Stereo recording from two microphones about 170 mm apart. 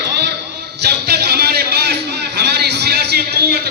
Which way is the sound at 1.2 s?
70° right (ahead or behind).